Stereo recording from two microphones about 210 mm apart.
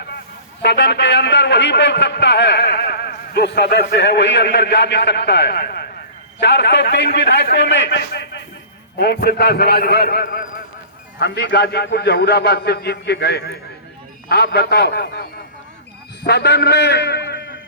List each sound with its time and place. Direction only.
0.6 s a man's voice: 55° left (ahead or behind)
16.2 s a man's voice: 50° left (ahead or behind)